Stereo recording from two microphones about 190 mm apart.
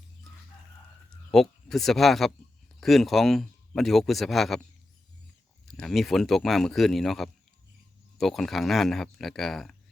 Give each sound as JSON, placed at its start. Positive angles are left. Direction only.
{"t": 0.3, "sound": "chicken", "side_deg": 0}
{"t": 1.3, "sound": "speech", "side_deg": 0}
{"t": 5.6, "sound": "speech", "side_deg": 0}